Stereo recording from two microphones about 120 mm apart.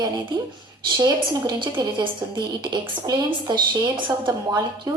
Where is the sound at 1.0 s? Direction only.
35° right (ahead or behind).